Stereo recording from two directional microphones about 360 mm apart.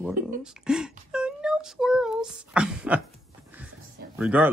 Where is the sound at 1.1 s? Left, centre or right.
Centre.